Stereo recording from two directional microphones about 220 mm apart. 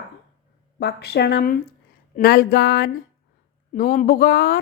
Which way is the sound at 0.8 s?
50° left (ahead or behind).